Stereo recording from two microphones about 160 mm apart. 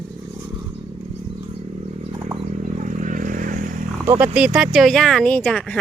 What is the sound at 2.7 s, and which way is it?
Vehicle, 50° right (ahead or behind).